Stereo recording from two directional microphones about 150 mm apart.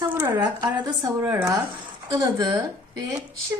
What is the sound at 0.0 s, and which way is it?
A woman's voice, 15° right (ahead or behind).